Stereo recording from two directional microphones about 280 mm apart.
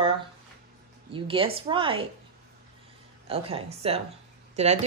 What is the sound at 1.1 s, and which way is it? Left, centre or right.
Speech, centre.